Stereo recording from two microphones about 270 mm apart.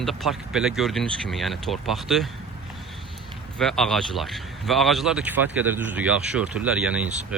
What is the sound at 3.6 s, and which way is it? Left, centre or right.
Speech, centre.